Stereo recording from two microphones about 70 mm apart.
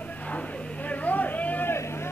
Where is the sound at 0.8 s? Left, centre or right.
Left.